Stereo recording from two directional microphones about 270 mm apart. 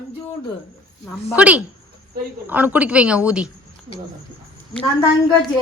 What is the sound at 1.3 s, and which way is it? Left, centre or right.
Speech, centre.